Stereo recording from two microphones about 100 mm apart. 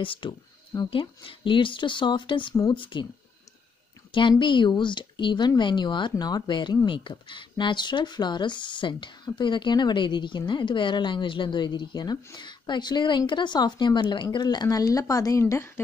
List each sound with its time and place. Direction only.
0.0 s speech: 60° left (ahead or behind)
4.1 s speech: 55° left (ahead or behind); by 15.8 s 25° left (ahead or behind)